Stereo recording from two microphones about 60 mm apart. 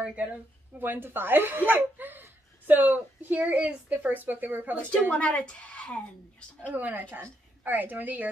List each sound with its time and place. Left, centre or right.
0.0 s speech: right
5.1 s a woman's voice: centre
6.7 s a woman's voice: right